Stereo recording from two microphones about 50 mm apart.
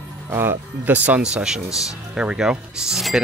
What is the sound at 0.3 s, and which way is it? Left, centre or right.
Speech, right.